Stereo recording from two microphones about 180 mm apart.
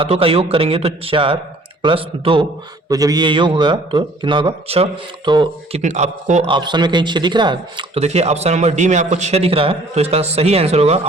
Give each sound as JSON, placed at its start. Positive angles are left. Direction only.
{"t": 0.0, "sound": "a man's voice", "side_deg": -30}
{"t": 5.8, "sound": "a man's voice", "side_deg": -40}
{"t": 6.5, "sound": "a man's voice", "side_deg": -25}